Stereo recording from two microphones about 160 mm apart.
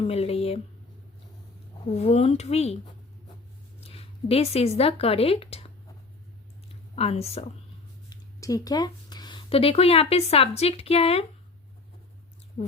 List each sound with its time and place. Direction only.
0.0 s a sound: 40° left (ahead or behind)
1.9 s speech: 40° left (ahead or behind)
3.8 s speech: 40° left (ahead or behind)
6.9 s speech: 40° left (ahead or behind)
8.1 s speech: 20° left (ahead or behind); by 11.3 s 40° left (ahead or behind)